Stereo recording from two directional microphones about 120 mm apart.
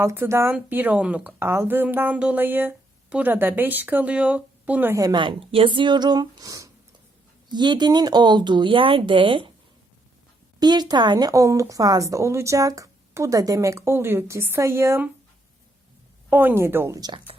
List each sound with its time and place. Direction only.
0.0 s a woman's voice: 20° right (ahead or behind)
4.9 s speech: 30° right (ahead or behind)
5.2 s speech: 50° right (ahead or behind); by 6.7 s 30° right (ahead or behind)
7.5 s speech: 40° right (ahead or behind)
10.6 s a woman's voice: 35° right (ahead or behind)
16.3 s a woman's voice: 15° right (ahead or behind)
17.0 s speech: 45° right (ahead or behind)